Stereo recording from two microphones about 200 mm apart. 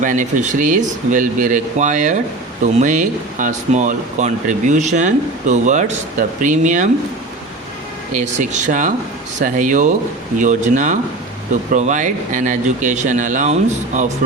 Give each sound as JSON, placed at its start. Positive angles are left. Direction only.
{"t": 0.0, "sound": "speech", "side_deg": -40}
{"t": 8.1, "sound": "speech", "side_deg": -40}